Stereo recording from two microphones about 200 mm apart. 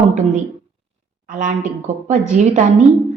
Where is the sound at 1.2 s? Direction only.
40° right (ahead or behind).